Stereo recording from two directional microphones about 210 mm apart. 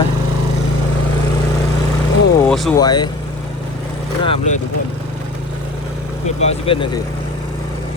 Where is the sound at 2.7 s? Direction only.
20° left (ahead or behind).